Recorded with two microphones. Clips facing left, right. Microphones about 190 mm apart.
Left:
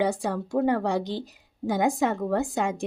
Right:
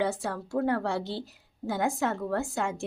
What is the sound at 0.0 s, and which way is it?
A woman's voice, 15° left (ahead or behind).